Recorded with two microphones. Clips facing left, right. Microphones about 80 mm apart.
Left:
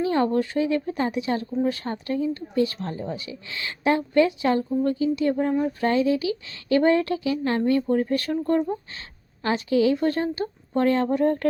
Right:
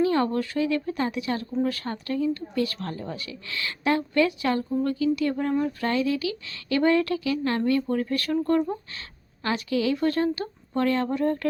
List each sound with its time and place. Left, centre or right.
0.0 s a woman's voice: left